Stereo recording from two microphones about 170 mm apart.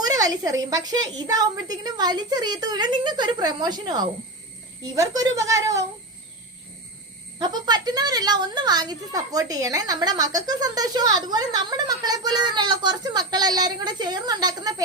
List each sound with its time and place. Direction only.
0.0 s a woman's voice: 20° right (ahead or behind)
7.3 s a woman's voice: 25° right (ahead or behind)